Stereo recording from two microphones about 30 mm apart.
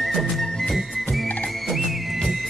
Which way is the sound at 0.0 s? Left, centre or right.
Centre.